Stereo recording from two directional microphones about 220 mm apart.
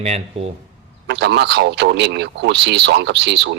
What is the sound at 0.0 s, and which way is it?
Speech, 30° right (ahead or behind).